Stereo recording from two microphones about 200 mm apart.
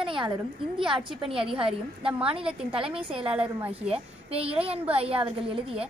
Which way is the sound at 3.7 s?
30° right (ahead or behind).